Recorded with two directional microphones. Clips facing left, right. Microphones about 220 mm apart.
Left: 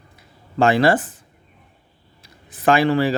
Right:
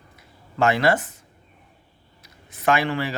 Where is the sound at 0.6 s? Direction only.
30° left (ahead or behind).